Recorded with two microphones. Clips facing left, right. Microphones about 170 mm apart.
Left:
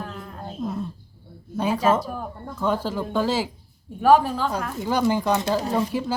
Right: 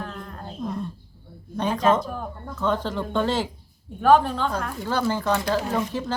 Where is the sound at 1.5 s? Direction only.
5° left (ahead or behind).